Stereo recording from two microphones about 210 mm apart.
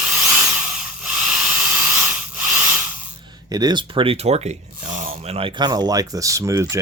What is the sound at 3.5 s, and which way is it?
Speech, 20° right (ahead or behind).